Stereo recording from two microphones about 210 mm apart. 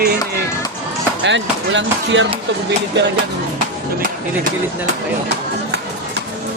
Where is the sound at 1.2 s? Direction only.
60° right (ahead or behind).